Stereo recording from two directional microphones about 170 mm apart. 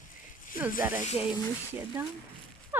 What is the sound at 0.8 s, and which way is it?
Speech, 10° right (ahead or behind).